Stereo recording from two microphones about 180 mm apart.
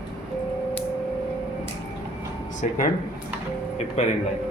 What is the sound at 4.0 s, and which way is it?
Speech, 35° left (ahead or behind).